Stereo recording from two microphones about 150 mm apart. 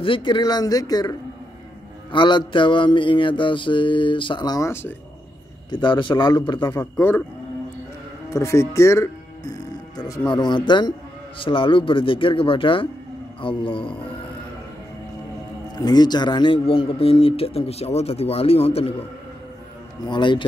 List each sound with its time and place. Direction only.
0.0 s speech: 35° left (ahead or behind)
2.1 s speech: 30° left (ahead or behind); by 4.9 s 15° left (ahead or behind)
5.7 s speech: 30° left (ahead or behind)
6.7 s speech: 15° left (ahead or behind)
8.3 s music: 20° left (ahead or behind)
10.3 s speech: 30° left (ahead or behind)
15.8 s speech: 25° left (ahead or behind)
20.1 s speech: 30° left (ahead or behind)